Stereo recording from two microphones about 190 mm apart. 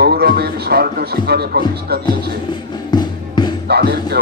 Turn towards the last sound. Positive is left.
turn(degrees=-55)  # may be behind; listen again after turning